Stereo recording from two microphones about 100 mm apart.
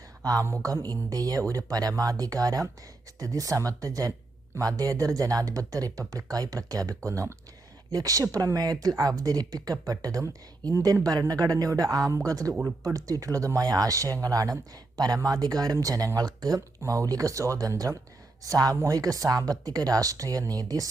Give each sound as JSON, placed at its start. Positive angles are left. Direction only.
{"t": 0.2, "sound": "a woman's voice", "side_deg": -40}